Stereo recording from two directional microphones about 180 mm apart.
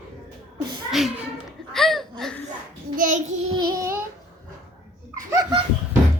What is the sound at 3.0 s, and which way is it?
Child singing, 45° right (ahead or behind).